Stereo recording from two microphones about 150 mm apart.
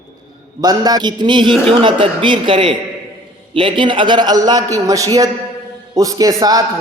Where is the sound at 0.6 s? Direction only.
25° right (ahead or behind).